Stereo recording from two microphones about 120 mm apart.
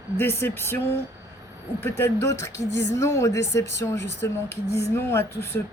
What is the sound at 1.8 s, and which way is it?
A woman's voice, 20° left (ahead or behind).